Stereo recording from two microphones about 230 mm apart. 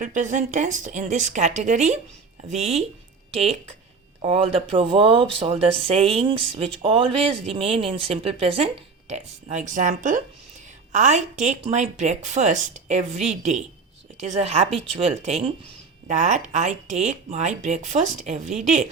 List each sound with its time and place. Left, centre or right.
0.0 s speech: right
3.3 s speech: right